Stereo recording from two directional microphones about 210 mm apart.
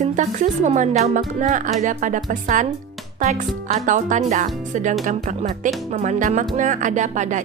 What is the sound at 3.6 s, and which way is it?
A woman's voice, 35° right (ahead or behind).